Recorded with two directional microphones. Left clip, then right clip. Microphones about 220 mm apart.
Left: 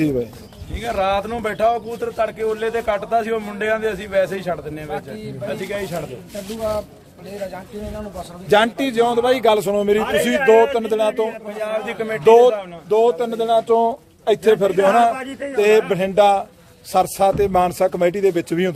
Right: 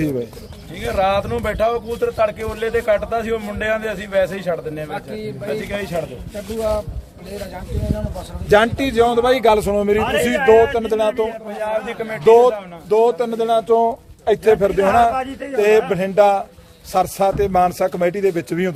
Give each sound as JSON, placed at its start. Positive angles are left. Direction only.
{"t": 0.8, "sound": "speech", "side_deg": 10}
{"t": 8.4, "sound": "a man's voice", "side_deg": 0}
{"t": 11.1, "sound": "a man's voice", "side_deg": 20}
{"t": 11.6, "sound": "a man's voice", "side_deg": 35}
{"t": 12.2, "sound": "speech", "side_deg": 5}
{"t": 12.9, "sound": "a man's voice", "side_deg": -5}